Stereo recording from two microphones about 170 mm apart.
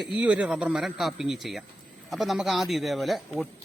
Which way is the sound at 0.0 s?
5° right (ahead or behind).